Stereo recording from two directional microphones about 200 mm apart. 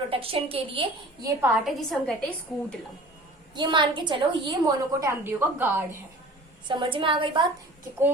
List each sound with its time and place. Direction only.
0.1 s a woman's voice: 30° right (ahead or behind)
1.4 s a woman's voice: centre (ahead or behind)
3.5 s a woman's voice: 20° right (ahead or behind)
6.7 s a woman's voice: 25° right (ahead or behind)